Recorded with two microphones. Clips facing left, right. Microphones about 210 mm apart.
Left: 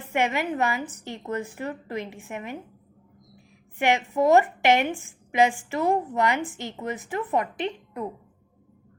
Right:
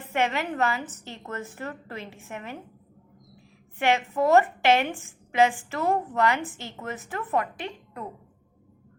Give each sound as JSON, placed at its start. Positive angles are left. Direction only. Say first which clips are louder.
{"t": 0.1, "sound": "a woman's voice", "louder": "left 2 dB", "side_deg": 15}
{"t": 3.8, "sound": "a woman's voice", "louder": "left 1 dB", "side_deg": 15}